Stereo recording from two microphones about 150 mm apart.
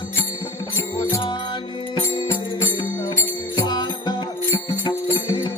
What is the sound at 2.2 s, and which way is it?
Music, 15° left (ahead or behind).